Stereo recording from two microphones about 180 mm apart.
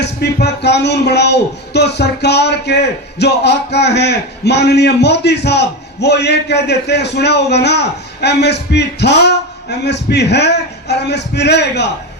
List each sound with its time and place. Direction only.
0.0 s speech: 65° left (ahead or behind)